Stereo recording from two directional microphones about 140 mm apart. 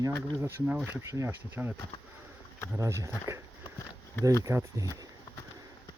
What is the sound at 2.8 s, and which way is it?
Speech, 20° right (ahead or behind).